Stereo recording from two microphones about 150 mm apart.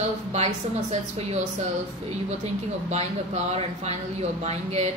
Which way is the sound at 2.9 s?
45° right (ahead or behind).